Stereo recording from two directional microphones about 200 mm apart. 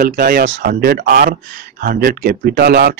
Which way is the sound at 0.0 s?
50° right (ahead or behind).